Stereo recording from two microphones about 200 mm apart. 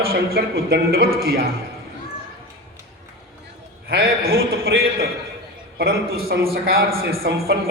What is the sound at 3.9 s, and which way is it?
A woman's voice, 50° right (ahead or behind).